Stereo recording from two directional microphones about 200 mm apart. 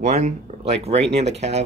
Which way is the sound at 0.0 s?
35° right (ahead or behind).